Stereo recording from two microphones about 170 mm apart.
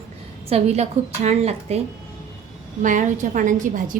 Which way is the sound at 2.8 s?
50° right (ahead or behind).